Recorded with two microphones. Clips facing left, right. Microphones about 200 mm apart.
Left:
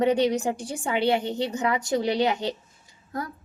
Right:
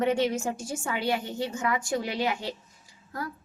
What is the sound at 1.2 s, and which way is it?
Speech, 70° left (ahead or behind).